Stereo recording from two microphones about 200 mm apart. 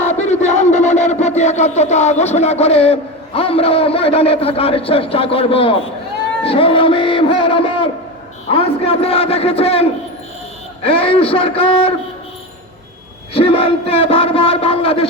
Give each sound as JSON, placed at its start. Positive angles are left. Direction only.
{"t": 0.0, "sound": "a sound", "side_deg": 35}
{"t": 6.4, "sound": "a man's voice", "side_deg": 25}
{"t": 13.3, "sound": "a man's voice", "side_deg": 25}